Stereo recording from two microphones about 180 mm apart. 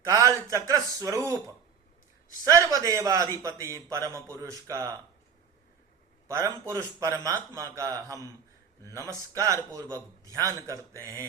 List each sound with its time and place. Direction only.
0.0 s a man's voice: 20° right (ahead or behind)
2.4 s a man's voice: 20° right (ahead or behind)
6.2 s a man's voice: 15° right (ahead or behind)